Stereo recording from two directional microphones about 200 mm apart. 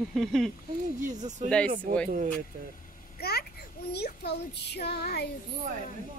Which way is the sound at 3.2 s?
50° left (ahead or behind).